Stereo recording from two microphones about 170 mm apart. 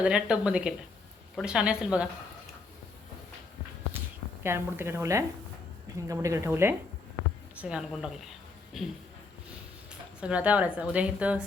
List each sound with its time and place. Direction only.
0.0 s a woman's voice: 5° right (ahead or behind)
4.4 s a woman's voice: 15° right (ahead or behind)
9.9 s speech: 5° right (ahead or behind)